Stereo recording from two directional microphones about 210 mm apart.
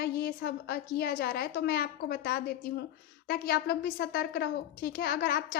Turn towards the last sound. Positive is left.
turn(degrees=45)  # may be behind; listen again after turning